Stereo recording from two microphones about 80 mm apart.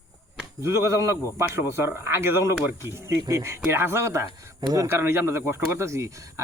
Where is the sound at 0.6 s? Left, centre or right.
Right.